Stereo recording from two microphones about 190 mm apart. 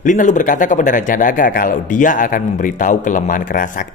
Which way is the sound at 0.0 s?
40° left (ahead or behind).